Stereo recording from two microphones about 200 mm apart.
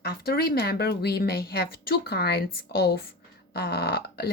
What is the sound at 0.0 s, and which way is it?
Speech, 50° left (ahead or behind).